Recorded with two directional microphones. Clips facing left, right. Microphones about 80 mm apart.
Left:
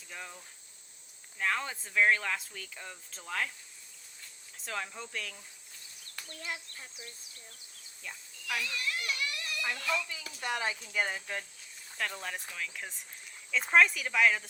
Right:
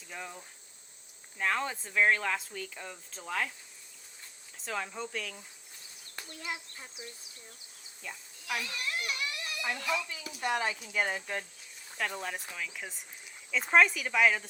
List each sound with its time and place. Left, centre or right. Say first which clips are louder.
0.1 s speech: right 2 dB; centre
1.4 s speech: right 2 dB; centre
4.6 s speech: right 3 dB; centre
6.1 s speech: right 1 dB; right
8.0 s speech: right 2 dB; centre
8.4 s speech: even; right
10.1 s speech: right 3 dB; right; by 14.4 s centre